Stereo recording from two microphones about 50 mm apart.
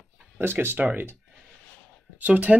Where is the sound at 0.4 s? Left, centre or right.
Right.